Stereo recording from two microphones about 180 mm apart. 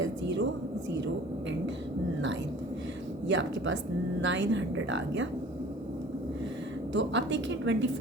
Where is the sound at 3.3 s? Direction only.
90° right.